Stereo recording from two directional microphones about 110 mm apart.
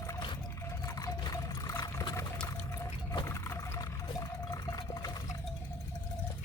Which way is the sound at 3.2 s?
25° left (ahead or behind).